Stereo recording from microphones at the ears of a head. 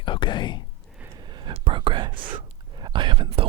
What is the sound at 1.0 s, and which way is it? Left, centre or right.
Whispering, right.